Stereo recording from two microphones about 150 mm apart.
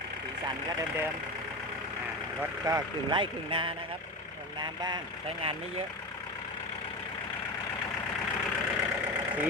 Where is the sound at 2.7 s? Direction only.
30° right (ahead or behind).